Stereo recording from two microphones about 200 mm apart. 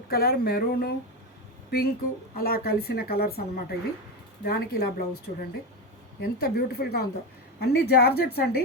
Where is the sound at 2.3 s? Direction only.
50° left (ahead or behind).